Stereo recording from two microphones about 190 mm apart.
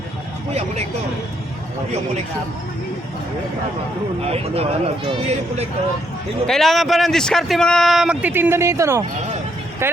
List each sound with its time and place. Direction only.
4.3 s speech: 30° right (ahead or behind)
6.5 s a man's voice: centre (ahead or behind)